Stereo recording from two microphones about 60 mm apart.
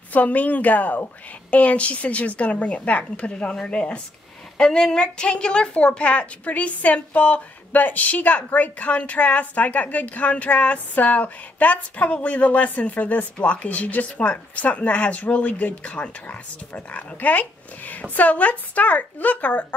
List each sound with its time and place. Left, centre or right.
0.1 s a woman's voice: left